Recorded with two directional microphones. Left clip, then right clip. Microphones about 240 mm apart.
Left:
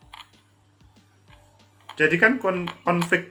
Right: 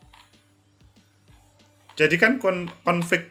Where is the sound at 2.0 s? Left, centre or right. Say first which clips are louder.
Even; right.